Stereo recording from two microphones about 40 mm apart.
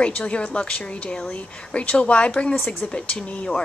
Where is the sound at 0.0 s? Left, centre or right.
Left.